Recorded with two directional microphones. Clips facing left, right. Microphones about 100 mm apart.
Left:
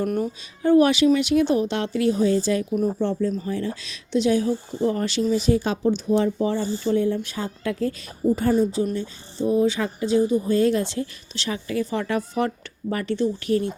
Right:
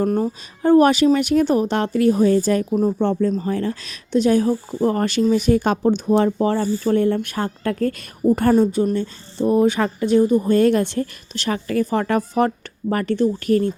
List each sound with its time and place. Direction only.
0.0 s a woman's voice: 35° right (ahead or behind); by 10.2 s 65° right (ahead or behind)
10.2 s speech: 50° right (ahead or behind)